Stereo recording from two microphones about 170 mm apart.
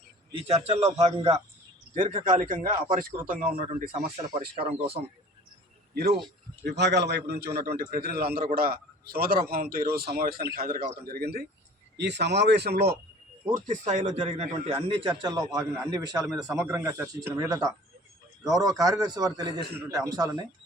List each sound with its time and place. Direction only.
0.3 s a man's voice: 35° right (ahead or behind); by 3.8 s 55° right (ahead or behind)
4.5 s a man's voice: 30° right (ahead or behind)
5.9 s speech: 65° right (ahead or behind)
6.7 s a man's voice: 90° right; by 11.4 s 65° right (ahead or behind)
11.9 s speech: 85° right
13.5 s a man's voice: 45° right (ahead or behind); by 20.4 s 25° right (ahead or behind)